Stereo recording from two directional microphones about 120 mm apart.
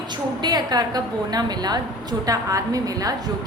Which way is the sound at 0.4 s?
35° right (ahead or behind).